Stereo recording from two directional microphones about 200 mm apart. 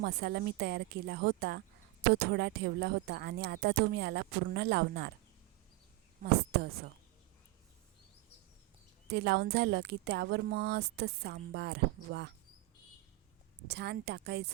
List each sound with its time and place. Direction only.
0.0 s a woman's voice: 55° right (ahead or behind)
6.3 s a woman's voice: 55° right (ahead or behind)
9.1 s a woman's voice: 55° right (ahead or behind)
13.7 s a woman's voice: 55° right (ahead or behind)